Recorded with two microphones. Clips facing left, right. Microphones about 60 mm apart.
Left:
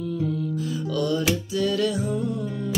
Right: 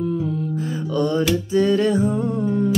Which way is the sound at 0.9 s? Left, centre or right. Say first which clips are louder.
Right 5 dB; right.